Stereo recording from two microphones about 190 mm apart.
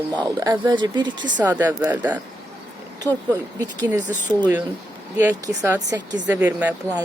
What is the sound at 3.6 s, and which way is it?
Speech, 20° right (ahead or behind).